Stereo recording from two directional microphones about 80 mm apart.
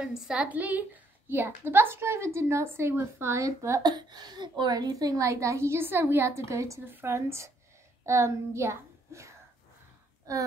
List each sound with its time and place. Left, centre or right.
0.0 s a woman's voice: centre; by 3.8 s right
3.8 s a woman's voice: right